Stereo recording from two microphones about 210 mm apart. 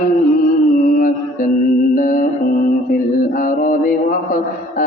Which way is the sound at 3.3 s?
40° left (ahead or behind).